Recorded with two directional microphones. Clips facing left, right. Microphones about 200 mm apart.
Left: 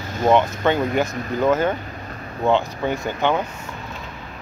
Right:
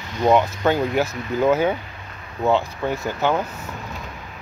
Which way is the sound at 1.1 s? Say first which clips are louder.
Left 1 dB; 45° left (ahead or behind).